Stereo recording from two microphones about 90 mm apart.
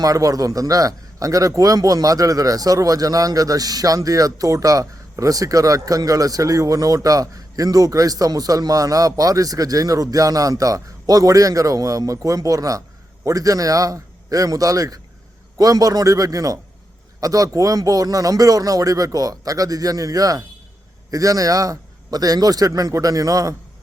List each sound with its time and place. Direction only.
0.0 s a man's voice: 40° right (ahead or behind)